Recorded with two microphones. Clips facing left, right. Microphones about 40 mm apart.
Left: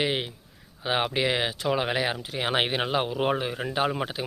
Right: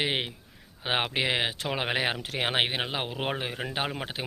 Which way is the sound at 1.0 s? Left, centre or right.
Centre.